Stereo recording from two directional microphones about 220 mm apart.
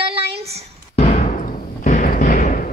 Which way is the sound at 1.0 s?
30° left (ahead or behind).